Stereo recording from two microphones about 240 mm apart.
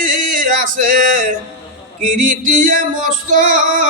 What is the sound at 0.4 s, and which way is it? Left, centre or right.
Music, right.